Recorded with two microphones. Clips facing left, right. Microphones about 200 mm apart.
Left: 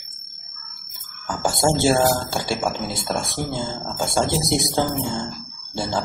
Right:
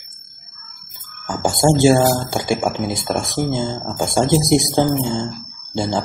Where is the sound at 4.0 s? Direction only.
15° right (ahead or behind).